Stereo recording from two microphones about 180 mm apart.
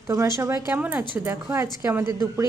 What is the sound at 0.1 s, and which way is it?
A woman's voice, 15° right (ahead or behind).